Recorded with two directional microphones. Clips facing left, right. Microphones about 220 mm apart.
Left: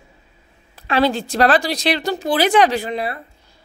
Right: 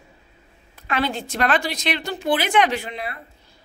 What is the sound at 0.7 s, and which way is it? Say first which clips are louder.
A woman's voice: left 7 dB; 35° left (ahead or behind).